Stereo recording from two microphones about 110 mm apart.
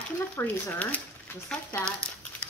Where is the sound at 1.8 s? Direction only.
10° left (ahead or behind).